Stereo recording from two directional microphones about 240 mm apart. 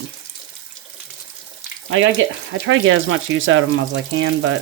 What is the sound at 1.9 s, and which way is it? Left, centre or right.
Speech, right.